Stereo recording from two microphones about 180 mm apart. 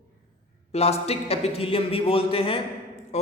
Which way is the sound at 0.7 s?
35° left (ahead or behind).